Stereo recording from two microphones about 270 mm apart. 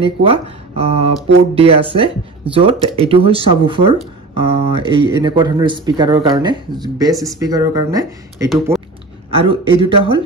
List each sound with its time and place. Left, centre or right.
0.0 s speech: centre
8.7 s a sound: centre
9.3 s speech: right